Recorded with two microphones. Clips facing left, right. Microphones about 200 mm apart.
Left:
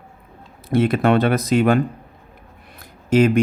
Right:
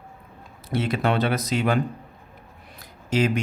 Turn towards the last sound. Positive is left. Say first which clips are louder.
# left 8 dB
turn(degrees=50)  # may be behind; listen again after turning